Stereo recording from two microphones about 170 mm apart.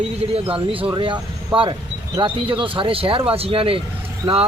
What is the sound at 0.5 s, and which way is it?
Speech, 30° right (ahead or behind).